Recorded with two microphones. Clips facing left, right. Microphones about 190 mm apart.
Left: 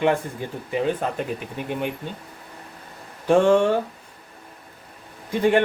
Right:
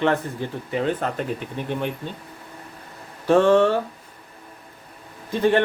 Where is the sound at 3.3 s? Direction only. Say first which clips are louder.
Right 1 dB; 15° left (ahead or behind).